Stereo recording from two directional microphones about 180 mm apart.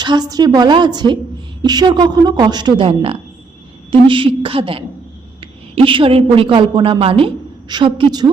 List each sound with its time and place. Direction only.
0.0 s a woman's voice: 25° right (ahead or behind)